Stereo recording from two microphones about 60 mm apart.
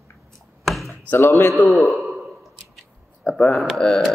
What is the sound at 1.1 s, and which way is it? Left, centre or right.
Speech, left.